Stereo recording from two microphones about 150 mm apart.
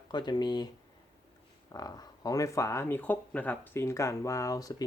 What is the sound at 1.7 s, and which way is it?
Speech, 25° left (ahead or behind).